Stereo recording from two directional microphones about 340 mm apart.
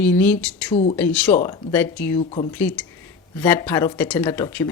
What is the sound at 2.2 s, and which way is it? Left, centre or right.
Speech, centre.